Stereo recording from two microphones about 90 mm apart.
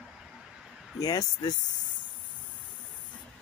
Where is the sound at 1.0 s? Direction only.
45° left (ahead or behind).